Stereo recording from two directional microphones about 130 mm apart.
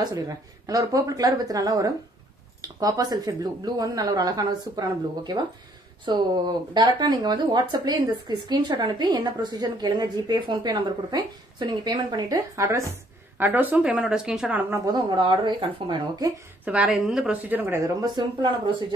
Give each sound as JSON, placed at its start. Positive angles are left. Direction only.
{"t": 0.0, "sound": "speech", "side_deg": -30}
{"t": 13.4, "sound": "speech", "side_deg": -15}
{"t": 14.9, "sound": "speech", "side_deg": -35}
{"t": 16.6, "sound": "speech", "side_deg": -5}
{"t": 17.7, "sound": "speech", "side_deg": -25}